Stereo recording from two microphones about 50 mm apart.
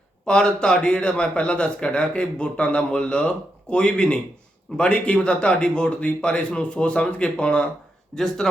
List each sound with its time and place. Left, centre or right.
0.3 s speech: centre
8.1 s speech: centre